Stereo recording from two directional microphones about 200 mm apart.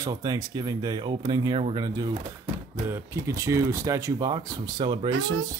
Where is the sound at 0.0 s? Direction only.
20° right (ahead or behind).